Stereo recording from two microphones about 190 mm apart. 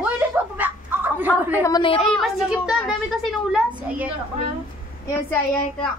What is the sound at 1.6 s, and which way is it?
Speech, 25° left (ahead or behind).